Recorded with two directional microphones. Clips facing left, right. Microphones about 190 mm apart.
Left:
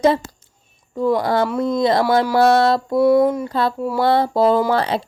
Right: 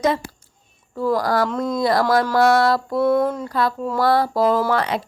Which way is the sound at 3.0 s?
10° left (ahead or behind).